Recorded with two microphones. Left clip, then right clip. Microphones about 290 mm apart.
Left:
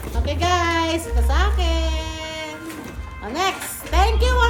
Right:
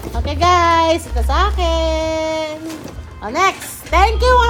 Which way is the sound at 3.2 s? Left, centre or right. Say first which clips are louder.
Right 7 dB; right.